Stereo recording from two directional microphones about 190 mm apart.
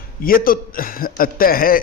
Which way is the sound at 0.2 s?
50° left (ahead or behind).